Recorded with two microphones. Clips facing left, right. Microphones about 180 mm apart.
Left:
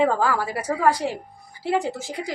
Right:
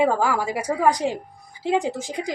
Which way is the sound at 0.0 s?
10° right (ahead or behind).